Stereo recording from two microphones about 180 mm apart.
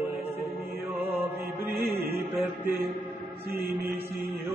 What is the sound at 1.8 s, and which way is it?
Music, 60° right (ahead or behind).